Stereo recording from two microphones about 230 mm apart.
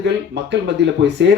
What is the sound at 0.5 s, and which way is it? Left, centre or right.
Speech, right.